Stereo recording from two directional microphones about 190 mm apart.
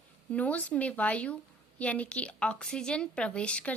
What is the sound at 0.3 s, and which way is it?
A woman's voice, 5° left (ahead or behind).